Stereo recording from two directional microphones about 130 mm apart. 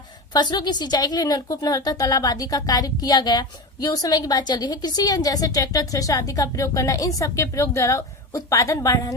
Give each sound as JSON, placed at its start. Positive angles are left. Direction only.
{"t": 0.3, "sound": "a woman's voice", "side_deg": 35}